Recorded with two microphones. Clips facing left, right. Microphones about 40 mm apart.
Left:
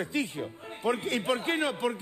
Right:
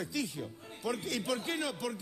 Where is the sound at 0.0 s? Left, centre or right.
Left.